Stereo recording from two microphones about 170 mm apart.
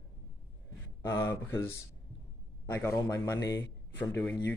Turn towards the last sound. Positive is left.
turn(degrees=10)  # may be behind; listen again after turning